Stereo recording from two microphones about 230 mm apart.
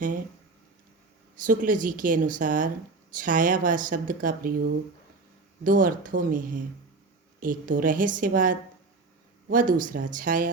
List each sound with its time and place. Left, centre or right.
1.5 s speech: right